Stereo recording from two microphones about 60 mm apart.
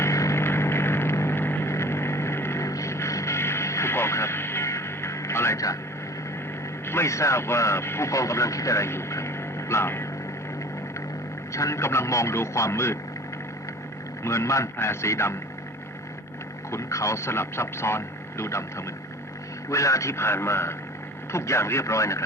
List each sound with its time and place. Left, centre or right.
0.0 s vehicle: left
2.6 s vehicle: left
6.8 s speech: left
11.5 s speech: left
14.3 s speech: left
16.7 s speech: left
19.7 s speech: left